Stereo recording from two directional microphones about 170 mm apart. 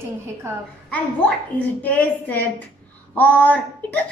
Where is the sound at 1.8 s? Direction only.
10° left (ahead or behind).